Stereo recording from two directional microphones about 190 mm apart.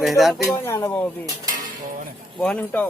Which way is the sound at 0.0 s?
Centre (ahead or behind).